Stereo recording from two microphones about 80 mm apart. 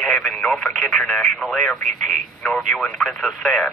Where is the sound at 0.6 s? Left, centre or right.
Centre.